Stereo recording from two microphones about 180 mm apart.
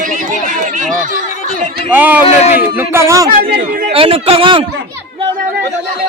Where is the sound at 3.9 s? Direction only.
30° right (ahead or behind).